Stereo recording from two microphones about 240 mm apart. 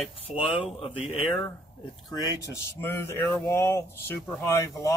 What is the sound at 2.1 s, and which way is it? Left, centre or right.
Speech, centre.